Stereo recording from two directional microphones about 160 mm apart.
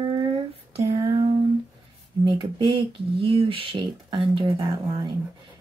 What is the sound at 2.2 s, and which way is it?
Speech, 30° right (ahead or behind).